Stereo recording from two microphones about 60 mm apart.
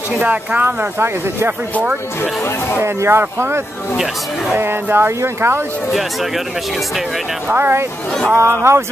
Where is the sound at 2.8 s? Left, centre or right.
Right.